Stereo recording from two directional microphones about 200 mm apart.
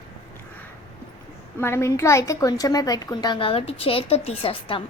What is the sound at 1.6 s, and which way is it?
A woman's voice, 10° left (ahead or behind).